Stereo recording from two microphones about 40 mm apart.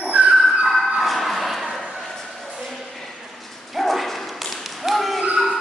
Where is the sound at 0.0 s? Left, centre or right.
Right.